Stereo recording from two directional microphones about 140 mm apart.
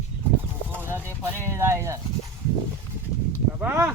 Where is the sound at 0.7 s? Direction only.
15° right (ahead or behind).